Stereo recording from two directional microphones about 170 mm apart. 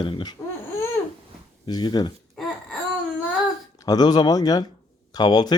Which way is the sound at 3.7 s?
20° left (ahead or behind).